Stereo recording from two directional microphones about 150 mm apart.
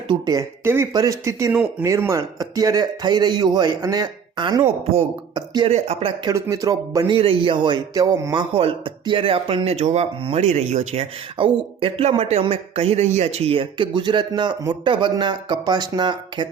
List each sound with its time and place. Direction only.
0.1 s a man's voice: 25° right (ahead or behind)
5.6 s speech: 40° right (ahead or behind)
6.3 s a man's voice: 20° right (ahead or behind)
7.1 s speech: 35° right (ahead or behind)
8.5 s speech: 35° right (ahead or behind)
11.3 s speech: 35° right (ahead or behind)